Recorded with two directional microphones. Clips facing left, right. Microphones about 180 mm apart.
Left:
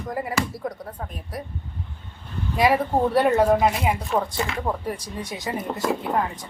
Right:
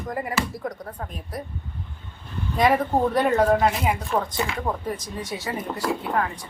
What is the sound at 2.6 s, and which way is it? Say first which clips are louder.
Speech: even; 10° left (ahead or behind).